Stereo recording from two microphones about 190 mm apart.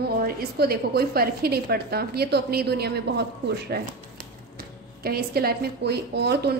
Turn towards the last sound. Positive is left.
turn(degrees=-60)  # may be behind; listen again after turning